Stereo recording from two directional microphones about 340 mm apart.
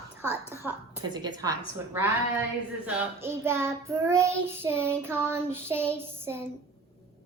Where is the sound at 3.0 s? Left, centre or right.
Centre.